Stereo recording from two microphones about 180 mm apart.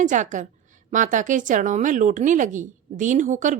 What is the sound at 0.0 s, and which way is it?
A woman's voice, 45° right (ahead or behind).